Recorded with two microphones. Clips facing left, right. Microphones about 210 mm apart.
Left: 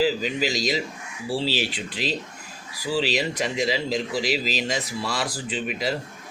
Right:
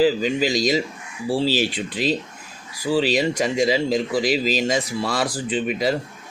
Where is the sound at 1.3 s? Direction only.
45° right (ahead or behind).